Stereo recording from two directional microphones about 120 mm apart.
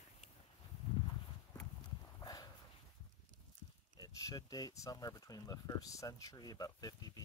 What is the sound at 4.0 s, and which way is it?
Speech, 30° left (ahead or behind).